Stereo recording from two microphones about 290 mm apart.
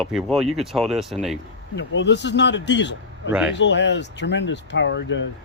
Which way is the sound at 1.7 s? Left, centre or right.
Left.